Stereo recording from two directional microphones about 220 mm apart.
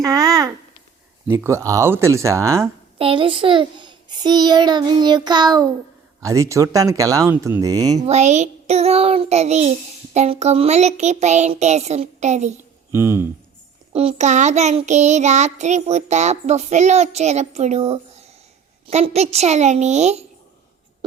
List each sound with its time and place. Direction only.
0.0 s a sound: 15° right (ahead or behind)
1.3 s speech: 10° right (ahead or behind)
3.0 s a child's voice: 25° right (ahead or behind)
8.0 s a child's voice: 30° right (ahead or behind)
10.2 s child singing: 30° right (ahead or behind)
12.9 s speech: 10° right (ahead or behind)
13.9 s child singing: 25° right (ahead or behind)
18.9 s a child's voice: 30° right (ahead or behind)